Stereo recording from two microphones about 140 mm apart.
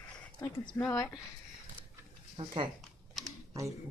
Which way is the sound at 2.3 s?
35° right (ahead or behind).